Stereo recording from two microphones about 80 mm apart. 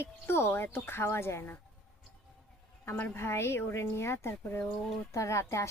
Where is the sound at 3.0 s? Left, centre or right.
Left.